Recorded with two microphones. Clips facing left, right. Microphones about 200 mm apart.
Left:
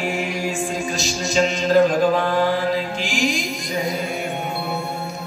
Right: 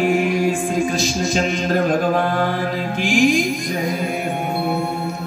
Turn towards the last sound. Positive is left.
turn(degrees=-55)  # may be behind; listen again after turning